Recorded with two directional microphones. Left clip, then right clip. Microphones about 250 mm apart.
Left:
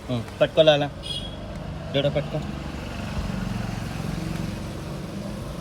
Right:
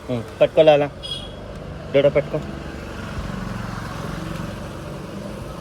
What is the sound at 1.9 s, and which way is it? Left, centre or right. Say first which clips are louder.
Speech: right 8 dB; centre.